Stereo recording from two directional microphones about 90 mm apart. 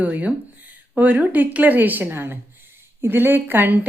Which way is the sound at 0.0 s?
15° right (ahead or behind).